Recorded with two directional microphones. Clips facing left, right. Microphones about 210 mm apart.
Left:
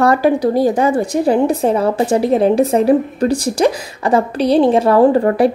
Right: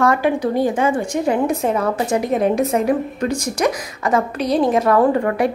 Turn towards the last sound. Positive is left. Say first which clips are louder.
# left 5 dB
turn(degrees=35)  # may be behind; listen again after turning